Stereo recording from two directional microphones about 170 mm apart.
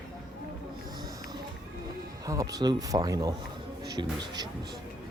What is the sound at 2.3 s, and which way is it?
Speech, 20° right (ahead or behind).